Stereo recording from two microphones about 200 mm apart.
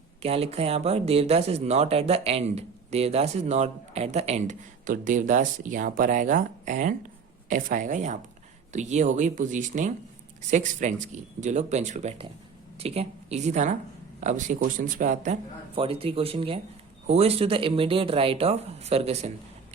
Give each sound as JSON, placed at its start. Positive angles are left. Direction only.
{"t": 0.2, "sound": "speech", "side_deg": -30}